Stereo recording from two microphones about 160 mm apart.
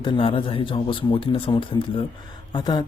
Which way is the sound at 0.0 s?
30° left (ahead or behind).